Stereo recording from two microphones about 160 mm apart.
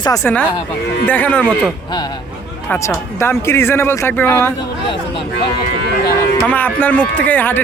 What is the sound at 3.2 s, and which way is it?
Speech, 15° left (ahead or behind).